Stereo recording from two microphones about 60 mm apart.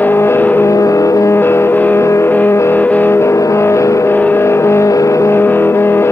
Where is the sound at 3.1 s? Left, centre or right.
Left.